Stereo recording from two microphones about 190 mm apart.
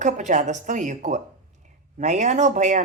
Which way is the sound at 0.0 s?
40° right (ahead or behind).